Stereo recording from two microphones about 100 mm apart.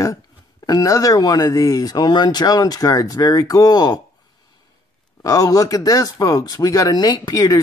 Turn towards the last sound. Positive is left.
turn(degrees=40)  # may be behind; listen again after turning